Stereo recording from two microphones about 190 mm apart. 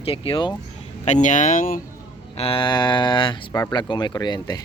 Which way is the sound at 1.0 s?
40° left (ahead or behind).